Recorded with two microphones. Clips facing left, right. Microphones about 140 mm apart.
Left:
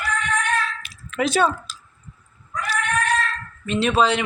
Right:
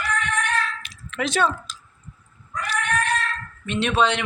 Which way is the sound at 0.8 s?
5° left (ahead or behind).